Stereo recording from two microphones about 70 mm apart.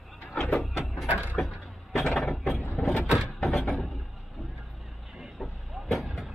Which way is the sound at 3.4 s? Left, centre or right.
Centre.